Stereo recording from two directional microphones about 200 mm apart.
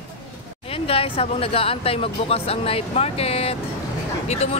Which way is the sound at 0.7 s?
30° left (ahead or behind).